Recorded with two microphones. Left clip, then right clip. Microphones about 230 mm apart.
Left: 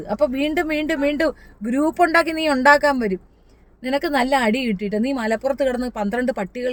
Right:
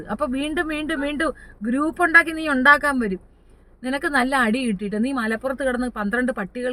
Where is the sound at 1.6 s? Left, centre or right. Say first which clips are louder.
Left 3 dB; centre.